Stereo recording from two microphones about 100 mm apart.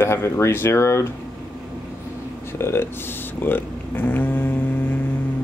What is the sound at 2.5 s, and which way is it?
Speech, 25° left (ahead or behind).